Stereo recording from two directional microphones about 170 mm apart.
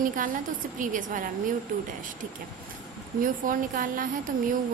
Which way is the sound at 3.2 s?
55° right (ahead or behind).